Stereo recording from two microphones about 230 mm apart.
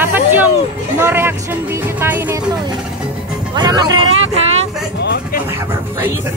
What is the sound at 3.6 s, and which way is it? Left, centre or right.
Vehicle, centre.